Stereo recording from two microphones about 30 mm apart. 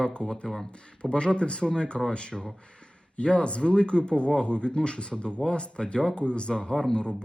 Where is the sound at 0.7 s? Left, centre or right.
Left.